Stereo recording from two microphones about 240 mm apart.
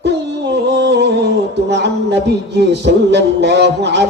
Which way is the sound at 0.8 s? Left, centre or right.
Right.